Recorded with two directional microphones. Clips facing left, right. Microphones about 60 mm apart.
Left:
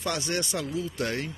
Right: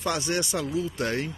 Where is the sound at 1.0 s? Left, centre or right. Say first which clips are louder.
Even; right.